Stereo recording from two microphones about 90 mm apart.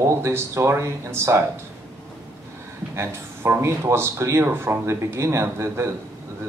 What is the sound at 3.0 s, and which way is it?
A man's voice, 30° right (ahead or behind).